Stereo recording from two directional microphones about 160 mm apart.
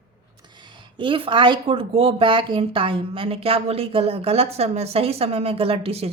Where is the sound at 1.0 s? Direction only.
30° right (ahead or behind).